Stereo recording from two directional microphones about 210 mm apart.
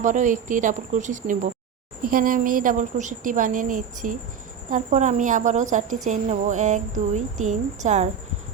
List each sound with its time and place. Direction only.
0.0 s a woman's voice: 35° right (ahead or behind)